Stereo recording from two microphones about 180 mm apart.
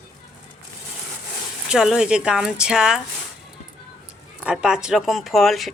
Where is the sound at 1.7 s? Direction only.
5° right (ahead or behind).